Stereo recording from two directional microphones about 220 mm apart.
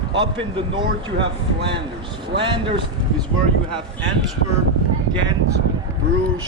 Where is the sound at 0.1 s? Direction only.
20° right (ahead or behind).